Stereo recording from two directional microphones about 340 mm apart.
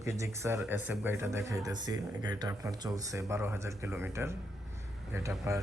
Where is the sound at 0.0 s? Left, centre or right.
Centre.